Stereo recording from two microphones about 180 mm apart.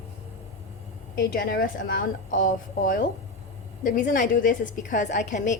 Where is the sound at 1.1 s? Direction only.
60° left (ahead or behind).